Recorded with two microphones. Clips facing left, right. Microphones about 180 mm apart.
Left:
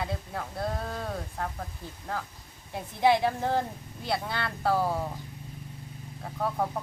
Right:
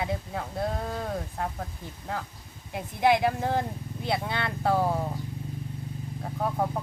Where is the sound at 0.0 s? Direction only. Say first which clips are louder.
Right 3 dB; 15° right (ahead or behind).